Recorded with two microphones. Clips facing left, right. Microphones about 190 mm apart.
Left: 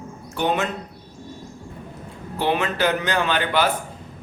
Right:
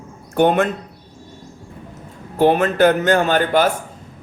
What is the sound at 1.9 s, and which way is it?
A man's voice, 45° right (ahead or behind).